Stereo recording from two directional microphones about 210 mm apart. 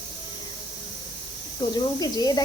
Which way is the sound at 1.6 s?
20° left (ahead or behind).